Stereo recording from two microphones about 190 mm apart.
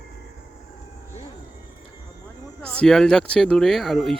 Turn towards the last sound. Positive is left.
turn(degrees=0)  # may be behind; listen again after turning